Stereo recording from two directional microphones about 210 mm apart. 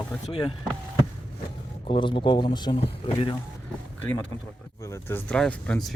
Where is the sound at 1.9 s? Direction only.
25° left (ahead or behind).